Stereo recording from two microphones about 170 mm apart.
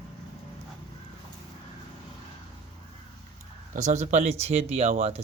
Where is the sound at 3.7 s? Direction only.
45° right (ahead or behind).